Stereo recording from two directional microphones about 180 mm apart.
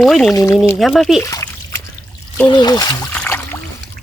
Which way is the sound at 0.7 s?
Centre (ahead or behind).